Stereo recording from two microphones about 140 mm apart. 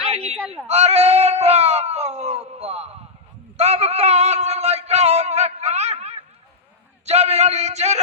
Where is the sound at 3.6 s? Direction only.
50° right (ahead or behind).